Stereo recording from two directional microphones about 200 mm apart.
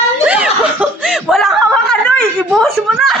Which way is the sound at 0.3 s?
5° right (ahead or behind).